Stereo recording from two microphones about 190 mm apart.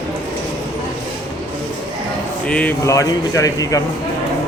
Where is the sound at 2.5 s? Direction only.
10° left (ahead or behind).